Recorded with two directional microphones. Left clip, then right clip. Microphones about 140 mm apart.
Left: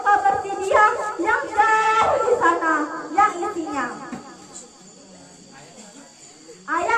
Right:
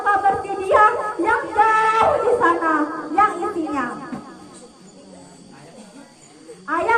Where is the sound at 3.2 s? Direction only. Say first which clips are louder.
Right 1 dB; 20° right (ahead or behind).